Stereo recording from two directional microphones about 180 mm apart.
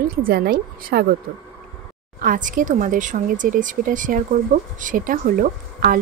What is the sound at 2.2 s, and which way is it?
Speech, 50° right (ahead or behind).